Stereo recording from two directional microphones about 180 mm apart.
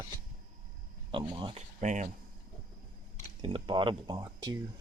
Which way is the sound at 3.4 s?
25° right (ahead or behind).